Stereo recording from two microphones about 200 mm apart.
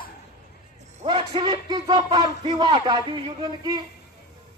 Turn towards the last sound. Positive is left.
turn(degrees=-20)  # may be behind; listen again after turning